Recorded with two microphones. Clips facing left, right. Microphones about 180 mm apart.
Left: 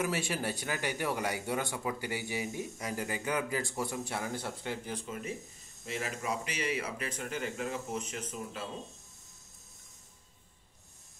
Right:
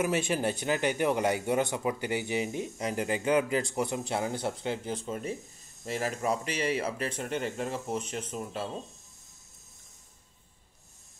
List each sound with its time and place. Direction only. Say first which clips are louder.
0.0 s a man's voice: right 5 dB; 20° right (ahead or behind)